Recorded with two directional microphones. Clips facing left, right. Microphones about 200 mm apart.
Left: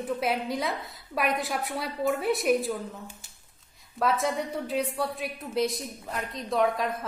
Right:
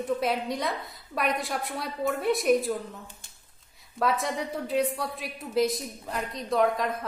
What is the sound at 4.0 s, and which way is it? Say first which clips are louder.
A woman's voice: left 1 dB; centre (ahead or behind).